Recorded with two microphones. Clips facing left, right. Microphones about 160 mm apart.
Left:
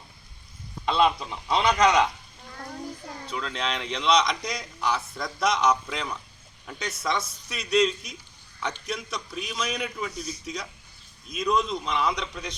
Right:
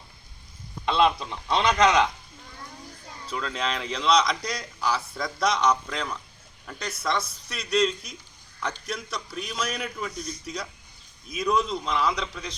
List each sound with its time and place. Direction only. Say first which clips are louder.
0.9 s a man's voice: right 1 dB; centre (ahead or behind)
3.2 s a man's voice: right 1 dB; centre (ahead or behind)